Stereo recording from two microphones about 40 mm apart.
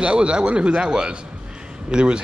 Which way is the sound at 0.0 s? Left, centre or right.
Right.